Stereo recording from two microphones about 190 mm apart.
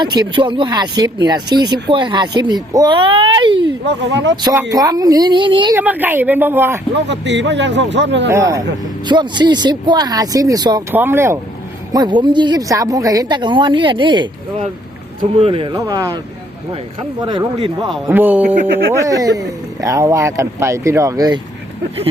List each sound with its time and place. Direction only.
0.0 s speech: 20° right (ahead or behind)
3.8 s a man's voice: 70° right (ahead or behind)
4.7 s speech: 20° right (ahead or behind)
5.7 s speech: 10° right (ahead or behind)
7.1 s a man's voice: 70° right (ahead or behind)
8.3 s speech: 15° right (ahead or behind)
17.2 s speech: 20° right (ahead or behind)
18.1 s speech: 10° right (ahead or behind)